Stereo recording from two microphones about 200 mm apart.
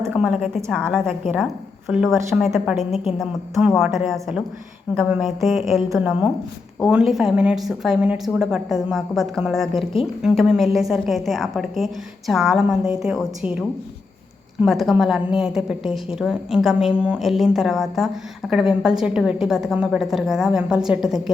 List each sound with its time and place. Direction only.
0.1 s a woman's voice: 5° right (ahead or behind)